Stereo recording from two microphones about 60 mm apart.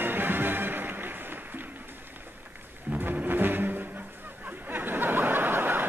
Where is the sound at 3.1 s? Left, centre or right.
Right.